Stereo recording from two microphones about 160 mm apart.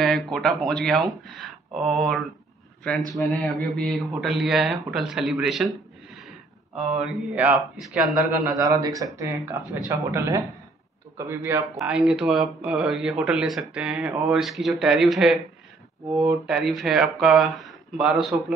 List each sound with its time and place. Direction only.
0.0 s speech: 5° left (ahead or behind)
3.2 s speech: 5° left (ahead or behind)
8.5 s speech: 20° right (ahead or behind)
11.7 s speech: 5° right (ahead or behind)